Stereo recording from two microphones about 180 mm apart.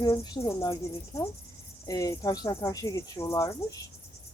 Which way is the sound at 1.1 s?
15° left (ahead or behind).